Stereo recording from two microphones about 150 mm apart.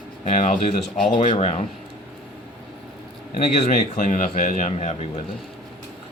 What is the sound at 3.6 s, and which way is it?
A man's voice, 55° left (ahead or behind).